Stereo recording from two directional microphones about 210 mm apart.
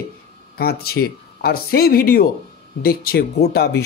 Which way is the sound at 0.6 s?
45° left (ahead or behind).